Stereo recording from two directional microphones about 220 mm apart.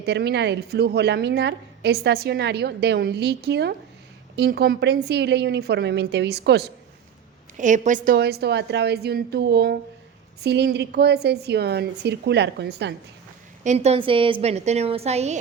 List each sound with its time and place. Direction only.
0.0 s a woman's voice: 50° right (ahead or behind)
7.5 s a woman's voice: 35° right (ahead or behind)
13.7 s a woman's voice: 30° right (ahead or behind)